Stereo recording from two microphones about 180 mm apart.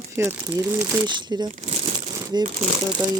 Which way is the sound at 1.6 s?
35° right (ahead or behind).